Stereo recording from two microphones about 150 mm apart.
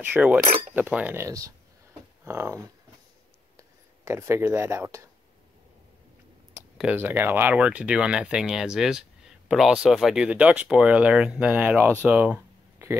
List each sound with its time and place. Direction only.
0.0 s speech: 10° right (ahead or behind)
6.8 s speech: 10° right (ahead or behind)